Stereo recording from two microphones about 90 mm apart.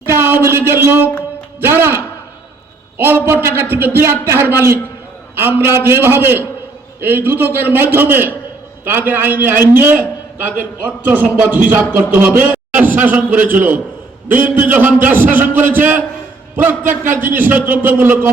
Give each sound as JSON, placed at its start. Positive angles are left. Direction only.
{"t": 0.0, "sound": "a sound", "side_deg": -25}
{"t": 1.6, "sound": "a man's voice", "side_deg": -25}
{"t": 3.0, "sound": "a man's voice", "side_deg": -25}